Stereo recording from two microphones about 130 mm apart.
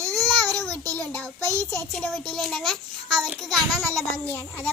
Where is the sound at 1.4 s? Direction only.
25° right (ahead or behind).